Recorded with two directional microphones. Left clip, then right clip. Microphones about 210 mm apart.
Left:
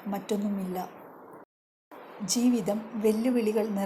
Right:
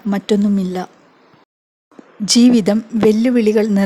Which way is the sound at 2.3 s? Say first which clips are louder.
Right 14 dB; 40° right (ahead or behind).